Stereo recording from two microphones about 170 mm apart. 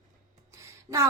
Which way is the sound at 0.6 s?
15° right (ahead or behind).